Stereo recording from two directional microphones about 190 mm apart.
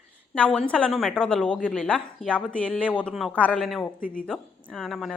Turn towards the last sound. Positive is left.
turn(degrees=0)  # may be behind; listen again after turning